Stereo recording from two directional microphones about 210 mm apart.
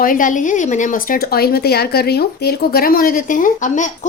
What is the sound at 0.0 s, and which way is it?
Speech, 40° left (ahead or behind).